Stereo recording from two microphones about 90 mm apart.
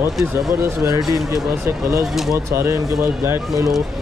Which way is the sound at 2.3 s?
30° right (ahead or behind).